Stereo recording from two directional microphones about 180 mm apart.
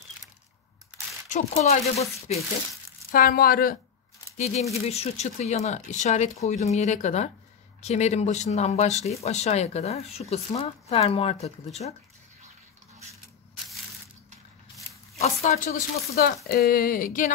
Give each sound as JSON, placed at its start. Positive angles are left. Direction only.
{"t": 1.5, "sound": "speech", "side_deg": 35}
{"t": 3.1, "sound": "speech", "side_deg": 55}
{"t": 4.7, "sound": "speech", "side_deg": 35}
{"t": 15.1, "sound": "speech", "side_deg": 40}